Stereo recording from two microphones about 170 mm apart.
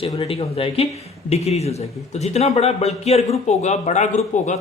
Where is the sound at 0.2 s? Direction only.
35° left (ahead or behind).